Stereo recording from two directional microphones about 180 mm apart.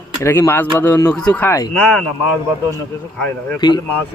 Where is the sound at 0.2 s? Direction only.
15° left (ahead or behind).